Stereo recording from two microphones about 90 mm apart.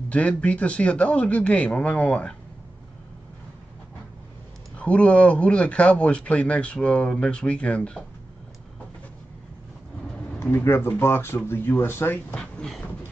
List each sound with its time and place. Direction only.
0.1 s speech: 15° left (ahead or behind)
4.7 s speech: 15° left (ahead or behind)
10.4 s speech: 30° left (ahead or behind)
12.4 s a sound: 5° left (ahead or behind)